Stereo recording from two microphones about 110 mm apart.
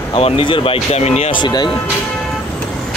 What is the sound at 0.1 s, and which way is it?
Speech, 55° left (ahead or behind).